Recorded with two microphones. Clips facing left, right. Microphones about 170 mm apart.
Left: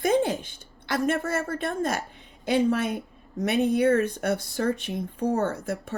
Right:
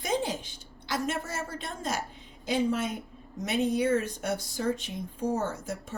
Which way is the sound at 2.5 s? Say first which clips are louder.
Left 5 dB; 65° left (ahead or behind).